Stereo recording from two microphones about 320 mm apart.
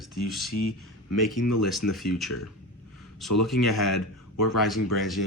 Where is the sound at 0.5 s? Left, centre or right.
Left.